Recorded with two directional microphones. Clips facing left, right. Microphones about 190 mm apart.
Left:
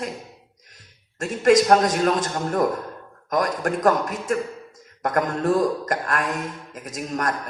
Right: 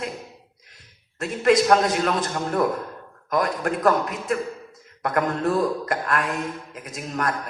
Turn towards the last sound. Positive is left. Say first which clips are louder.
# left 1 dB
turn(degrees=45)  # may be behind; listen again after turning